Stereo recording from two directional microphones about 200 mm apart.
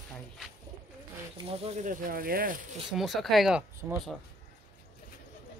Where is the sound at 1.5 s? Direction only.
35° right (ahead or behind).